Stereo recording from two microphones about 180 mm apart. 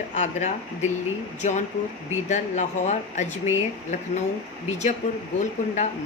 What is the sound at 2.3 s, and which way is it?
Speech, 40° left (ahead or behind).